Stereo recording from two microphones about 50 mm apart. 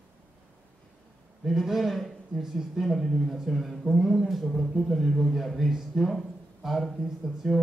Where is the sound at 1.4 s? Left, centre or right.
Centre.